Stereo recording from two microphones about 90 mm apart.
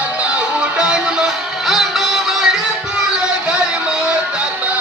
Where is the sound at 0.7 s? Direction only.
10° right (ahead or behind).